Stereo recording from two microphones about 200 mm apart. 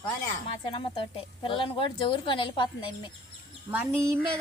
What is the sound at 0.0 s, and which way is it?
A woman's voice, 30° left (ahead or behind).